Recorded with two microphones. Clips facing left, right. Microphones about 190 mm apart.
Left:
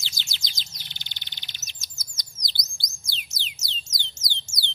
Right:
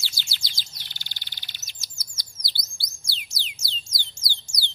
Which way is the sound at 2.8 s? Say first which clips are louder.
Left 1 dB; 20° left (ahead or behind).